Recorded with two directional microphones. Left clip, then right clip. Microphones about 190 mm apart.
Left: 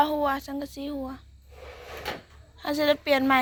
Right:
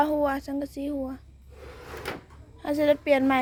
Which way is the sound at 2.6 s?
15° right (ahead or behind).